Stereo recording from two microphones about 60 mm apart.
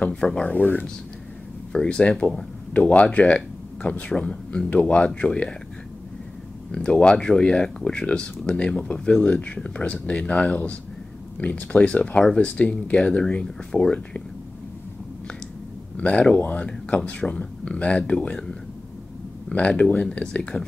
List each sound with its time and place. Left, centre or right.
0.0 s speech: centre
0.6 s speech: left
1.7 s speech: centre
6.7 s speech: centre
16.0 s speech: centre